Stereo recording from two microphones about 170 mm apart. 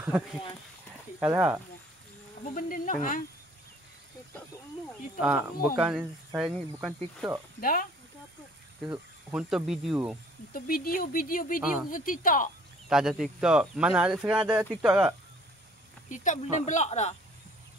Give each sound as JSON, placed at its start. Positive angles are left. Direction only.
{"t": 1.2, "sound": "speech", "side_deg": -10}
{"t": 2.5, "sound": "speech", "side_deg": 50}
{"t": 5.2, "sound": "speech", "side_deg": -5}
{"t": 8.9, "sound": "speech", "side_deg": -5}
{"t": 10.5, "sound": "speech", "side_deg": 60}
{"t": 11.6, "sound": "speech", "side_deg": -5}
{"t": 11.9, "sound": "speech", "side_deg": 55}
{"t": 12.8, "sound": "speech", "side_deg": 0}
{"t": 16.1, "sound": "speech", "side_deg": 45}